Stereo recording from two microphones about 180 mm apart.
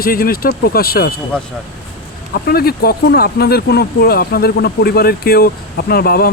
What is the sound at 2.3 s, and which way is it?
Speech, 60° left (ahead or behind).